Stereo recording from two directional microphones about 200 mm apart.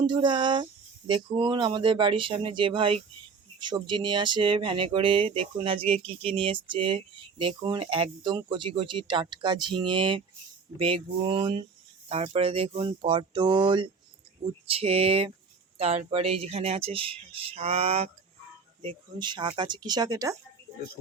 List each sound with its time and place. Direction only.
0.0 s speech: 25° right (ahead or behind)